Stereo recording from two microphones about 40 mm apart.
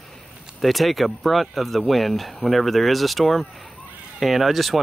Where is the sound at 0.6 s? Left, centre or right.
Centre.